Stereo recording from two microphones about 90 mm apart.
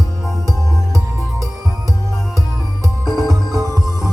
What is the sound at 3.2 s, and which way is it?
Music, 45° right (ahead or behind).